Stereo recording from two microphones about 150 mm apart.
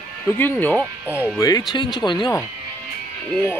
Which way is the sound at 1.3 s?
25° left (ahead or behind).